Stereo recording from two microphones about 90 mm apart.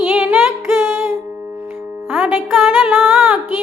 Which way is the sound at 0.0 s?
20° right (ahead or behind).